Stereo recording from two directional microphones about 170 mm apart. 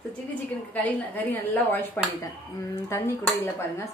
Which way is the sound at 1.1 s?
10° left (ahead or behind).